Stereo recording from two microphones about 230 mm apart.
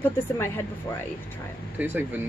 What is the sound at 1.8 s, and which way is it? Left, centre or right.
Speech, centre.